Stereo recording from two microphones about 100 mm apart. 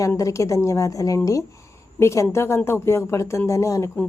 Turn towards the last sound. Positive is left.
turn(degrees=30)  # may be behind; listen again after turning